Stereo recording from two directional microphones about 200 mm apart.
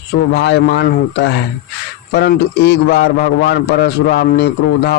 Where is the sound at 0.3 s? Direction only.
60° left (ahead or behind).